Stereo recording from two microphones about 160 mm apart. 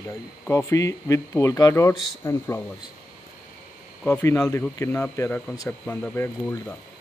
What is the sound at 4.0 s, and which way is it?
Speech, 15° left (ahead or behind).